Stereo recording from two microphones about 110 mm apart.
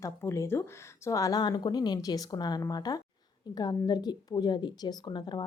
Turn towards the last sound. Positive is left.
turn(degrees=45)  # may be behind; listen again after turning